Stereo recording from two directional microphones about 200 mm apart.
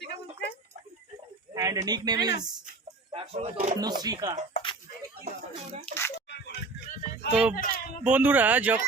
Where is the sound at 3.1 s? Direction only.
30° right (ahead or behind).